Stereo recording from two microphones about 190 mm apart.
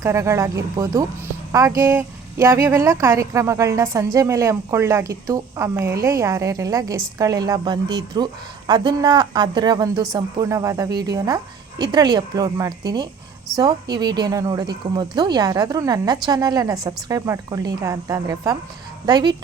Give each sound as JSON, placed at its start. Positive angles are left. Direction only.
{"t": 0.0, "sound": "a woman's voice", "side_deg": -15}